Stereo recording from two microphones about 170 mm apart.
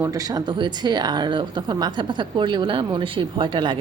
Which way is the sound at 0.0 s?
20° right (ahead or behind).